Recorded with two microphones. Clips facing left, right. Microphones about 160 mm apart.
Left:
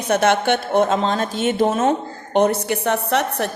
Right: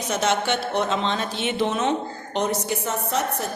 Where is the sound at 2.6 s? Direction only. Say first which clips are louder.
Left 6 dB; 70° left (ahead or behind).